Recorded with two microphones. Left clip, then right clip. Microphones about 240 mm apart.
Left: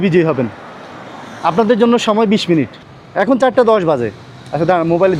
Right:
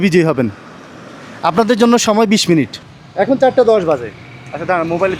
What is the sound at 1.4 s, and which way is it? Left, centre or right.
Speech, right.